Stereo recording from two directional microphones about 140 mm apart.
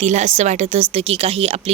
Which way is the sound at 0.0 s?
55° right (ahead or behind).